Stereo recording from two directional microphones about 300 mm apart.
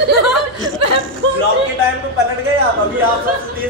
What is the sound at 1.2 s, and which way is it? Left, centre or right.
Speech, right.